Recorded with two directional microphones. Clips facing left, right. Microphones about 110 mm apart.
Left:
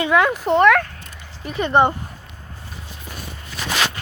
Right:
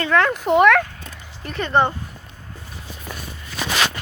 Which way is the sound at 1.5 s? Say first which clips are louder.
Left 2 dB; 15° left (ahead or behind).